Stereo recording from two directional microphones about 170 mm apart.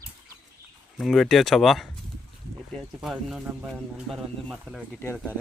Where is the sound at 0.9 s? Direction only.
Centre (ahead or behind).